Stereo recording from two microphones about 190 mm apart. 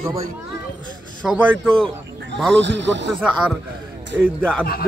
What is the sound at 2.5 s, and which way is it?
Speech, 70° right (ahead or behind).